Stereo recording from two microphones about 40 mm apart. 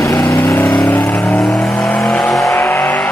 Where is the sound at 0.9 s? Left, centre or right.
Left.